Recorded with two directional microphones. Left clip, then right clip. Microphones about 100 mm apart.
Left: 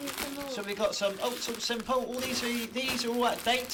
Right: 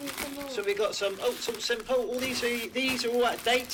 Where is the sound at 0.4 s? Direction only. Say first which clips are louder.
Right 3 dB; 35° left (ahead or behind).